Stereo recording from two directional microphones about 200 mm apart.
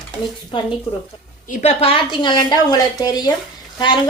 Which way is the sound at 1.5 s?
35° left (ahead or behind).